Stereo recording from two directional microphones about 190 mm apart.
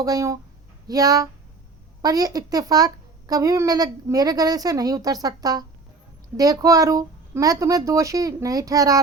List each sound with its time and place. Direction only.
0.0 s a child's voice: 20° right (ahead or behind)